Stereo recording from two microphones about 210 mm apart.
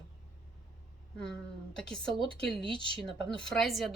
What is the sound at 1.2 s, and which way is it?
Speech, 5° left (ahead or behind).